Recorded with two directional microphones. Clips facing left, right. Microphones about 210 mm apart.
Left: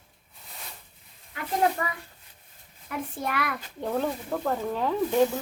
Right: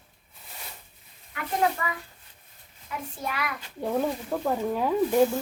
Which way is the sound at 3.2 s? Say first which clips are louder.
Left 2 dB; 55° left (ahead or behind).